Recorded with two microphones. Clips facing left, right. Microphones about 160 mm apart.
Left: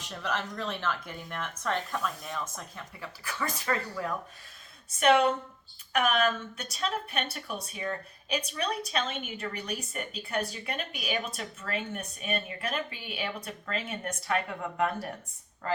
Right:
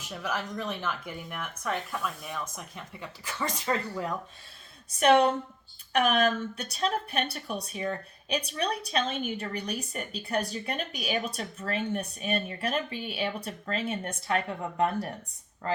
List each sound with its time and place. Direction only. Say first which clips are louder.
0.0 s speech: even; 10° right (ahead or behind)
4.9 s a woman's voice: right 2 dB; 35° right (ahead or behind)